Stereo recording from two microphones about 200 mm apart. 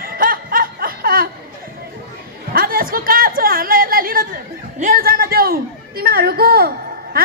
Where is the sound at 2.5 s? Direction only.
50° right (ahead or behind).